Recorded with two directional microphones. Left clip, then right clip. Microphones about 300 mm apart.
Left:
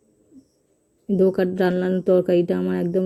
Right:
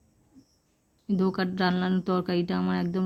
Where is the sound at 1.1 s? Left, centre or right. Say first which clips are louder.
Left 9 dB; centre.